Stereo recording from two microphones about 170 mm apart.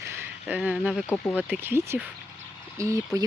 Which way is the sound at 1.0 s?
10° left (ahead or behind).